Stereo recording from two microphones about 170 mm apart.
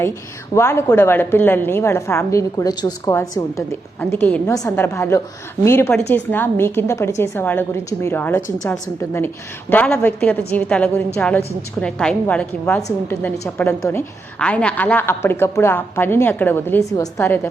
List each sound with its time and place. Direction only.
0.5 s a woman's voice: 15° left (ahead or behind)